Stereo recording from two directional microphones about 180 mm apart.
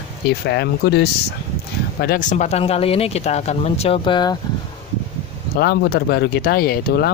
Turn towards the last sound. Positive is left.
turn(degrees=60)  # may be behind; listen again after turning